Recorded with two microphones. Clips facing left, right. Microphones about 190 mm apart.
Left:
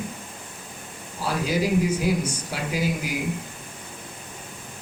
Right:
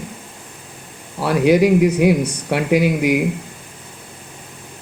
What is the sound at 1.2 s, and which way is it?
Speech, 65° right (ahead or behind).